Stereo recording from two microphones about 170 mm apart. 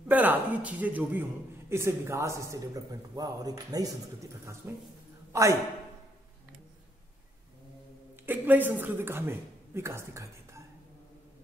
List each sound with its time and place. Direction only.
0.1 s a man's voice: 10° right (ahead or behind)
8.3 s a man's voice: 10° right (ahead or behind)